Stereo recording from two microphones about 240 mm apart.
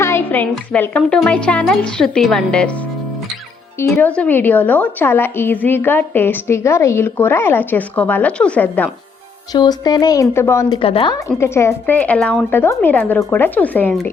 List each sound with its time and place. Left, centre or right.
0.0 s a woman's voice: centre
9.5 s a woman's voice: centre